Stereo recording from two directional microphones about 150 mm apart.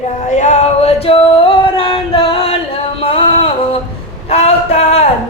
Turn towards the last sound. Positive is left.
turn(degrees=45)  # may be behind; listen again after turning